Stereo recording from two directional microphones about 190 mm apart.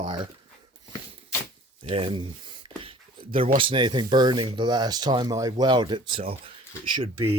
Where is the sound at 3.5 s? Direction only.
25° right (ahead or behind).